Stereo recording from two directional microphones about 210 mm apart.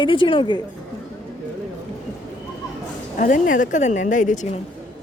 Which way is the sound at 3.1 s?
40° left (ahead or behind).